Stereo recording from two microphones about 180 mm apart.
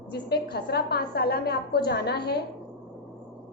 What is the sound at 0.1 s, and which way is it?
A woman's voice, 60° left (ahead or behind).